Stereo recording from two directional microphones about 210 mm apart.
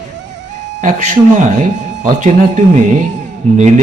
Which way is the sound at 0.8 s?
35° right (ahead or behind).